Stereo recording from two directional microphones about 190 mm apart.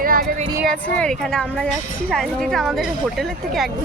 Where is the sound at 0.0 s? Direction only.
50° right (ahead or behind).